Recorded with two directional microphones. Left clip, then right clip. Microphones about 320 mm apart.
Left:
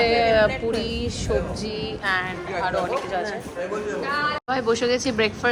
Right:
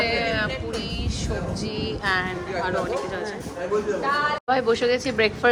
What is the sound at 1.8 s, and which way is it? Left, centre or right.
Music, centre.